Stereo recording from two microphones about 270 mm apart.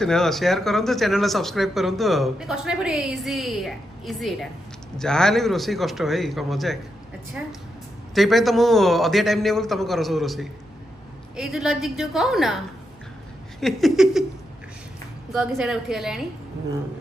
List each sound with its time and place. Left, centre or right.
0.0 s speech: centre
8.1 s speech: centre
15.4 s speech: centre